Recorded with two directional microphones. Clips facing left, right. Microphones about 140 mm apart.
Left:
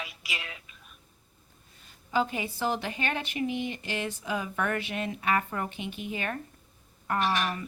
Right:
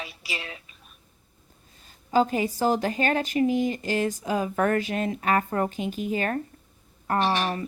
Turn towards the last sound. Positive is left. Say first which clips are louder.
# right 4 dB
turn(degrees=-30)  # may be behind; listen again after turning